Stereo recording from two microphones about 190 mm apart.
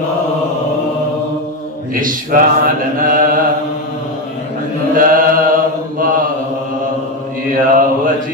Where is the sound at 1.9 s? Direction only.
45° right (ahead or behind).